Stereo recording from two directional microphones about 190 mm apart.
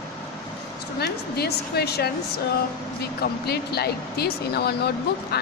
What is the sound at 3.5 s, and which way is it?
Speech, 55° left (ahead or behind).